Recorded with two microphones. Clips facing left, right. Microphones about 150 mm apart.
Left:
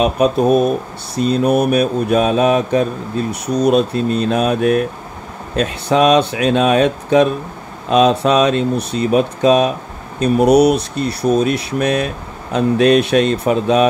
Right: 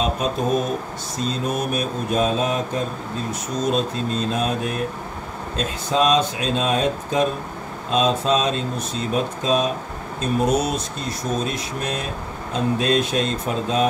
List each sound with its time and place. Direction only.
0.0 s speech: 65° left (ahead or behind)